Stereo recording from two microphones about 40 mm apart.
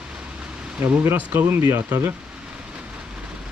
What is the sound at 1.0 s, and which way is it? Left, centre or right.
Speech, right.